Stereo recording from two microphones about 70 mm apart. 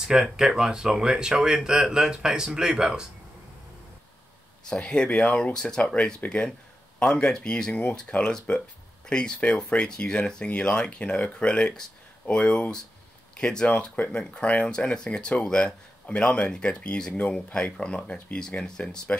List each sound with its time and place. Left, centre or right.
0.0 s speech: centre
4.6 s speech: centre